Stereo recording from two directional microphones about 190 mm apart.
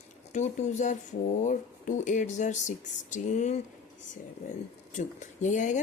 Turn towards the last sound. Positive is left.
turn(degrees=40)  # may be behind; listen again after turning